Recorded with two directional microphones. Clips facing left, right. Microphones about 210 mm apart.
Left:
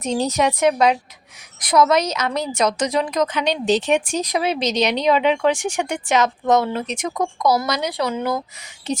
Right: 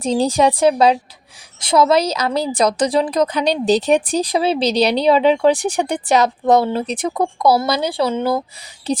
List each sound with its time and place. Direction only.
0.0 s a woman's voice: 30° right (ahead or behind)